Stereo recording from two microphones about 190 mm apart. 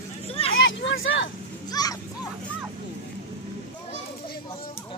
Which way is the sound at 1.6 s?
20° left (ahead or behind).